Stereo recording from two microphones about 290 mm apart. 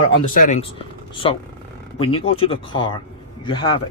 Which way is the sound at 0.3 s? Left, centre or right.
Left.